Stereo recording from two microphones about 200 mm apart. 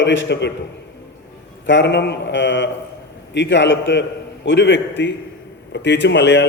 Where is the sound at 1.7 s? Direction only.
65° left (ahead or behind).